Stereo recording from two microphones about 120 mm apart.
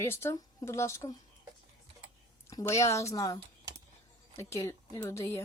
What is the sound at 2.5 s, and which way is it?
A woman's voice, 25° left (ahead or behind).